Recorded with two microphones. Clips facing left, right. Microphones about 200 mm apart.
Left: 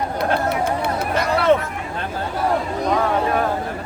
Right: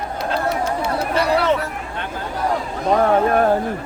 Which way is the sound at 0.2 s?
55° left (ahead or behind).